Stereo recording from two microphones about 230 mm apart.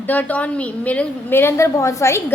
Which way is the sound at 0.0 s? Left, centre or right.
Centre.